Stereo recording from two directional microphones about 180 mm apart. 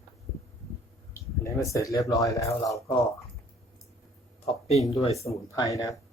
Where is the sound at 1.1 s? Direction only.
15° left (ahead or behind).